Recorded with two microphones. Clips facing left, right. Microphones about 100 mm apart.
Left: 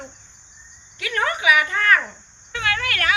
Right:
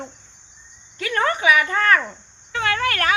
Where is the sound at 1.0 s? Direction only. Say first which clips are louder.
Right 2 dB; 35° right (ahead or behind).